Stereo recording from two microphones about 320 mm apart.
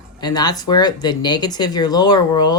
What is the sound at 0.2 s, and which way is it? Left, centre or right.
Speech, centre.